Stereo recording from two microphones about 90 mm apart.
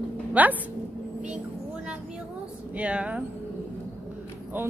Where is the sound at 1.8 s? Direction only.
10° right (ahead or behind).